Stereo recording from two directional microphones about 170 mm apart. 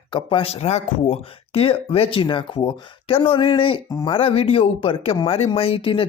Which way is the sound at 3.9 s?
20° left (ahead or behind).